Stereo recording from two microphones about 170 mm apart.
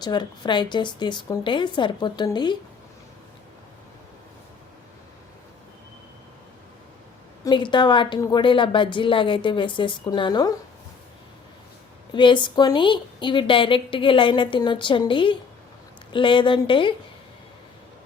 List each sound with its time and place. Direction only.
0.0 s a woman's voice: 25° left (ahead or behind)
7.4 s a woman's voice: 25° left (ahead or behind)
12.1 s a woman's voice: 30° left (ahead or behind)